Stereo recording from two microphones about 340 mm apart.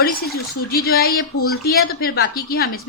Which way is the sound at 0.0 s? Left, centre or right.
Left.